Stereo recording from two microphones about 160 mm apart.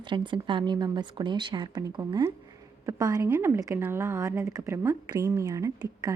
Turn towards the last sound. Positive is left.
turn(degrees=-20)  # may be behind; listen again after turning